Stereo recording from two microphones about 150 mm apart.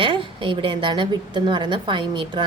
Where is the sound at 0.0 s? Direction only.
35° right (ahead or behind).